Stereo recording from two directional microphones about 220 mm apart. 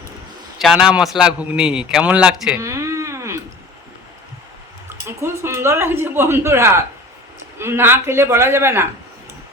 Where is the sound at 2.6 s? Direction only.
15° right (ahead or behind).